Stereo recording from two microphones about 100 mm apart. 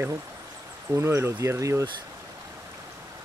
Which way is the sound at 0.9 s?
25° right (ahead or behind).